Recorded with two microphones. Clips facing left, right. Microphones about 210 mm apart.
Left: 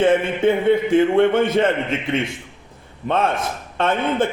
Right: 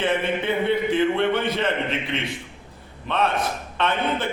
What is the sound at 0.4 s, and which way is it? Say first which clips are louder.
A man's voice: left 8 dB; 45° left (ahead or behind).